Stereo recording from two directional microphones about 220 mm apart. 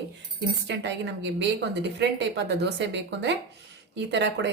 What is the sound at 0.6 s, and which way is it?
Speech, 50° right (ahead or behind).